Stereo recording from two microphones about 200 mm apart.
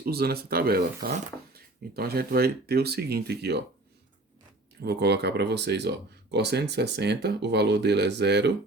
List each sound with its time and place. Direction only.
0.0 s speech: 50° right (ahead or behind)
4.8 s speech: 55° right (ahead or behind)